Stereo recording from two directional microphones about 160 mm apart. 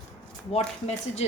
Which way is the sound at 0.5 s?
40° left (ahead or behind).